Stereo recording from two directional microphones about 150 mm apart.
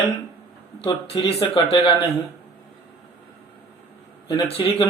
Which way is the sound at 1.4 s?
35° left (ahead or behind).